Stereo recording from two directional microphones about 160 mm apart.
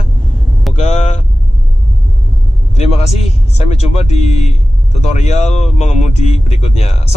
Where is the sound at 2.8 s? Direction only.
40° left (ahead or behind).